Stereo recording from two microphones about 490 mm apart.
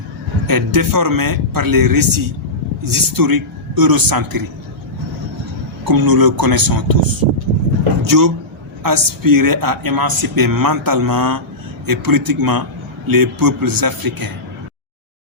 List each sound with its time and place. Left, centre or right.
0.4 s a man's voice: right
5.8 s a man's voice: right